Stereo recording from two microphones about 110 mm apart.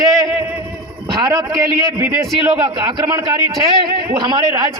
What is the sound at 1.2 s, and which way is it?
Speech, 35° right (ahead or behind).